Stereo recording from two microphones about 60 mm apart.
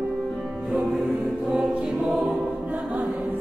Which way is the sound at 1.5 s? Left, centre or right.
Centre.